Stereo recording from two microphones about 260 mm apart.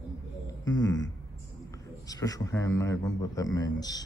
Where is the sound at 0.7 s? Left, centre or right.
Centre.